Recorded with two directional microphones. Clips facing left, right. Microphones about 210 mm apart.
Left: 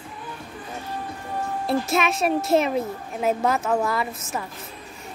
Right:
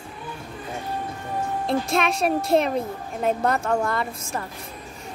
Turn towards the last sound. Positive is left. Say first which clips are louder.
# even
turn(degrees=5)  # may be behind; listen again after turning